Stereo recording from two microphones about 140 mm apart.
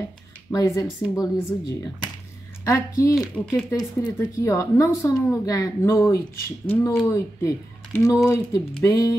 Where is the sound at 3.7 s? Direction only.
25° left (ahead or behind).